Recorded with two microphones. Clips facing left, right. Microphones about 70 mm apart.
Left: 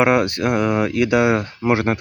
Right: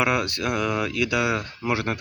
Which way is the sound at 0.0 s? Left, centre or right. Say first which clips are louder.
Left 7 dB; left.